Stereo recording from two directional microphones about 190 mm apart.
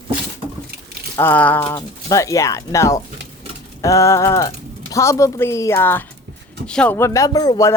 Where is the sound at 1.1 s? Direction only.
10° left (ahead or behind).